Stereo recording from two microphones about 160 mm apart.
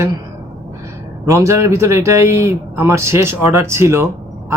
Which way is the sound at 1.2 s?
20° right (ahead or behind).